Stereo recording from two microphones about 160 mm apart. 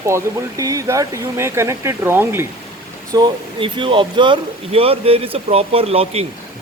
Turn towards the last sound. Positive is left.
turn(degrees=-40)  # may be behind; listen again after turning